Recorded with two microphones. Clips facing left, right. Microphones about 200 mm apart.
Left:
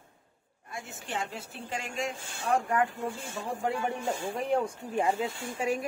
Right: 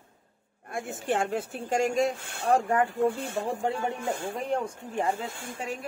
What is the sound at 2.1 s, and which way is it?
Speech, 60° right (ahead or behind).